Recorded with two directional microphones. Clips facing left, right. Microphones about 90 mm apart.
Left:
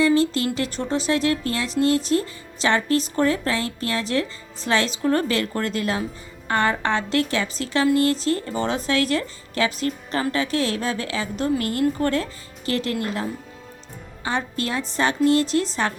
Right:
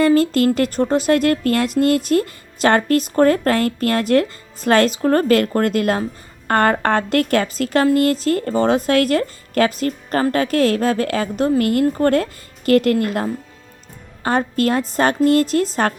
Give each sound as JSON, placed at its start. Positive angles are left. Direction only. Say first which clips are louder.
{"t": 0.0, "sound": "a woman's voice", "louder": "right 5 dB", "side_deg": -45}
{"t": 14.3, "sound": "a woman's voice", "louder": "right 8 dB", "side_deg": -45}